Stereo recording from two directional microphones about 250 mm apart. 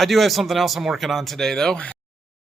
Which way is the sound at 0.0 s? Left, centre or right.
Centre.